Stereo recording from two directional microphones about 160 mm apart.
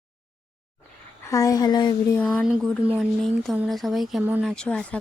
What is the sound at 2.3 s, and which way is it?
A woman's voice, centre (ahead or behind).